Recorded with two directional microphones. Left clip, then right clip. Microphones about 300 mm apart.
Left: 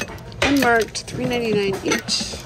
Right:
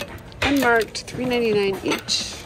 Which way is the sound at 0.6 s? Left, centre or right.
Centre.